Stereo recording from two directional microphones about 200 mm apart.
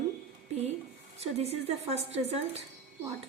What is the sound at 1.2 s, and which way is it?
A woman's voice, 30° right (ahead or behind).